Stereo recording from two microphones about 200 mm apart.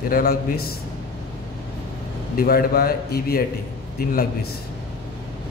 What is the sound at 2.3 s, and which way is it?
A man's voice, 50° left (ahead or behind).